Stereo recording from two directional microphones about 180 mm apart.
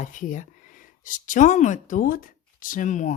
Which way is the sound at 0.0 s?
45° left (ahead or behind).